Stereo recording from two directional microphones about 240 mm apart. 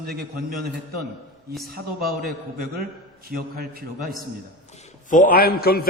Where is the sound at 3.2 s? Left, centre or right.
Right.